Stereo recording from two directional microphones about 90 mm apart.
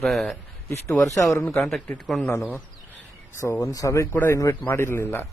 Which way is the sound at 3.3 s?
30° left (ahead or behind).